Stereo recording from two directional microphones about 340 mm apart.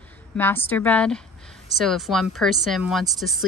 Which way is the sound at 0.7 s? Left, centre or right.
Centre.